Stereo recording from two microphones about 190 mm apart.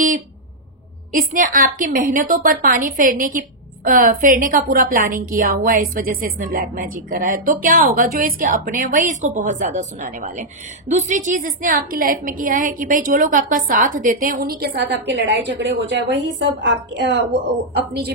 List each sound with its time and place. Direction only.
1.1 s a woman's voice: 45° right (ahead or behind)